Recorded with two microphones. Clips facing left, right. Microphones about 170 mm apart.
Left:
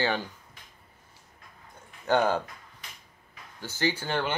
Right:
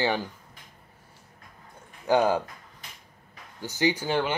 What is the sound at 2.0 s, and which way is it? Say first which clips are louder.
Speech: right 2 dB; 10° right (ahead or behind).